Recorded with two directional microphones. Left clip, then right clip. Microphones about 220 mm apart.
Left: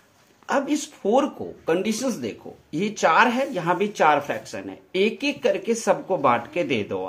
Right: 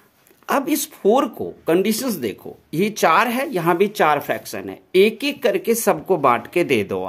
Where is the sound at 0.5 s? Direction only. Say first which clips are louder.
Right 3 dB; 50° right (ahead or behind).